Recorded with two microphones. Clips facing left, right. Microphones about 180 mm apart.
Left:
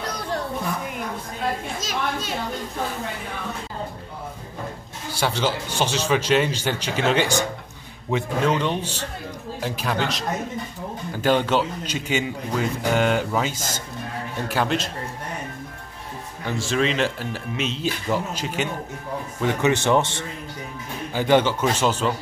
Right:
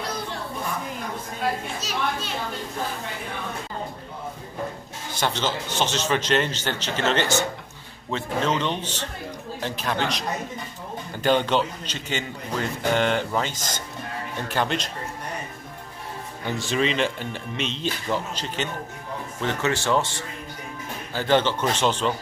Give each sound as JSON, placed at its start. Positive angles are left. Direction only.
{"t": 5.1, "sound": "speech", "side_deg": 10}
{"t": 16.4, "sound": "speech", "side_deg": 0}